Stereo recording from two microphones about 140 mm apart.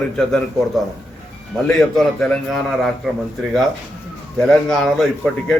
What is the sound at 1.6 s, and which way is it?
Speech, centre (ahead or behind).